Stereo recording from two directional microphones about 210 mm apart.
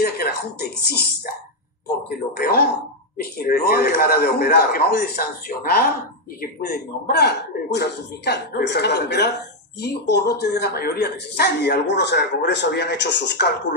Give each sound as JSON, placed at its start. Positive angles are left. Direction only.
{"t": 0.0, "sound": "speech", "side_deg": 50}